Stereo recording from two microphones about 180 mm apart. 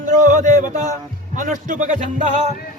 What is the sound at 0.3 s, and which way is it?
A man's voice, 45° right (ahead or behind).